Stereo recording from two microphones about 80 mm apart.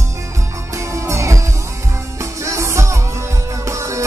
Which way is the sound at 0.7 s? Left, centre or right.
Right.